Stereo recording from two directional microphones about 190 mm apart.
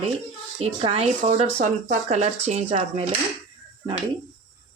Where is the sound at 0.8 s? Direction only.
30° right (ahead or behind).